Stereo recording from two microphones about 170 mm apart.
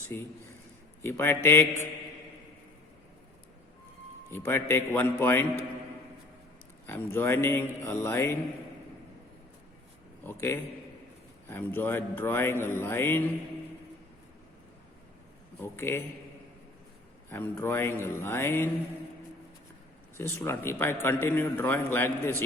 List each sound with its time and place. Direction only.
0.1 s a man's voice: 15° left (ahead or behind)
4.3 s a man's voice: 15° left (ahead or behind)
6.8 s a man's voice: 15° left (ahead or behind)
10.2 s a man's voice: 15° left (ahead or behind)
15.6 s a man's voice: 15° left (ahead or behind)
17.2 s a man's voice: 15° left (ahead or behind)
20.1 s a man's voice: 15° left (ahead or behind)